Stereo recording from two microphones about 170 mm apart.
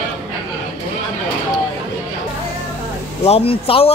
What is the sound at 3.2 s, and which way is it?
Speech, 35° left (ahead or behind).